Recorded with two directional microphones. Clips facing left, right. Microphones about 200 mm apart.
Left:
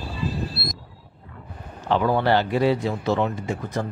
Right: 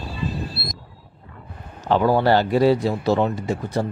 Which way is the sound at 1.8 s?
35° right (ahead or behind).